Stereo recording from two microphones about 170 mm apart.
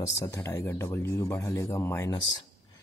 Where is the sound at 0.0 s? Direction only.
15° left (ahead or behind).